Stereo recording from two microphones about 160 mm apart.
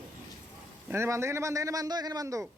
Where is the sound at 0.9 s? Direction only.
15° right (ahead or behind).